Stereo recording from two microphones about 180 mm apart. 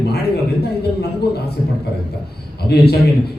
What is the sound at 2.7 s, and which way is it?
Speech, 65° left (ahead or behind).